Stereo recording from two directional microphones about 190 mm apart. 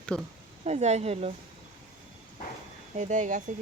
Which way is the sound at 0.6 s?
35° right (ahead or behind).